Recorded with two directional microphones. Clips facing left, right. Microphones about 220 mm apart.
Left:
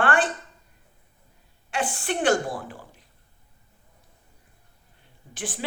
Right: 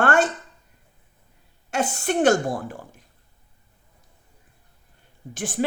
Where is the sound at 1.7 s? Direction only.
45° right (ahead or behind).